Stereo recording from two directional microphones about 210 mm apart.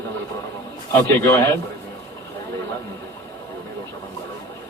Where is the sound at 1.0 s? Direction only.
15° left (ahead or behind).